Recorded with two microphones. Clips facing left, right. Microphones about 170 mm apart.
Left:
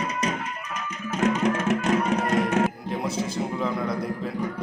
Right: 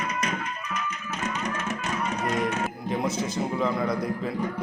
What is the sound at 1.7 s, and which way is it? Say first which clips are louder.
Music: left 7 dB; 55° left (ahead or behind).